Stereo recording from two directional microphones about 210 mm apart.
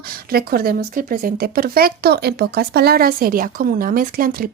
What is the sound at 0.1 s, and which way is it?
A woman's voice, 45° right (ahead or behind).